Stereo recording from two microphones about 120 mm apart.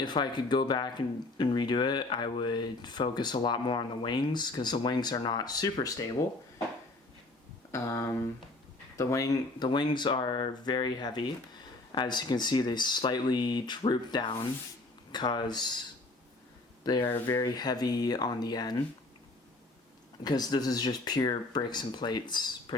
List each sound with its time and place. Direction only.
0.0 s speech: 40° left (ahead or behind)
7.7 s speech: 25° left (ahead or behind)
17.0 s speech: 20° left (ahead or behind)
17.3 s speech: 35° left (ahead or behind)
20.2 s speech: 35° left (ahead or behind)